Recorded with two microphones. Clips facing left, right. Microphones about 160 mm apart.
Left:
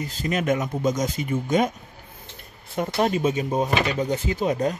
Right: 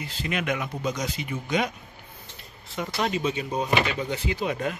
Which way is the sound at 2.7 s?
45° left (ahead or behind).